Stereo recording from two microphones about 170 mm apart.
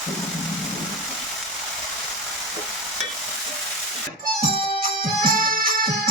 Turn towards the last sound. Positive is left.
turn(degrees=-55)  # may be behind; listen again after turning